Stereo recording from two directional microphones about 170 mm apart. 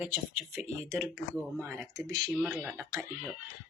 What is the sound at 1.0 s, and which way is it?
Speech, centre (ahead or behind).